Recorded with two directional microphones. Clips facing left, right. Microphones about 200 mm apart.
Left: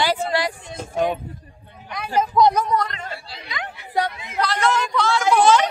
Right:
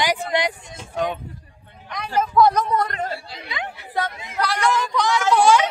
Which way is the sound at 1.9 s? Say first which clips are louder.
Right 1 dB; 10° left (ahead or behind).